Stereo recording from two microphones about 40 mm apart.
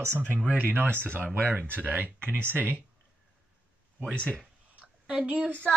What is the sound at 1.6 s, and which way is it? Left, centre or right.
Speech, right.